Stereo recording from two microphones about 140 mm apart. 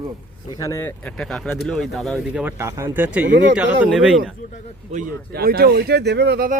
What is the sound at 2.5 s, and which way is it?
Speech, 20° right (ahead or behind).